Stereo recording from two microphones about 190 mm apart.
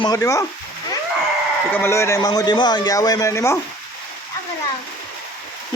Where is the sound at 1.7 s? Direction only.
15° left (ahead or behind).